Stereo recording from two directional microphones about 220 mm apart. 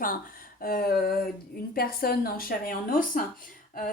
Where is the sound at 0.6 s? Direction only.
40° left (ahead or behind).